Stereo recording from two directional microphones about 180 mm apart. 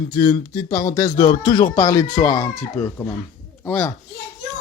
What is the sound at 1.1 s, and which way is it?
Speech, 40° left (ahead or behind).